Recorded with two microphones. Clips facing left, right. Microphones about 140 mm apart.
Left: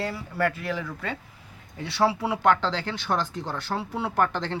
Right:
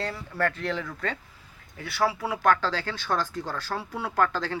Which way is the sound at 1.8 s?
25° left (ahead or behind).